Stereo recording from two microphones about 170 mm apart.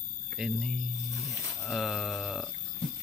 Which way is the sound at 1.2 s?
20° left (ahead or behind).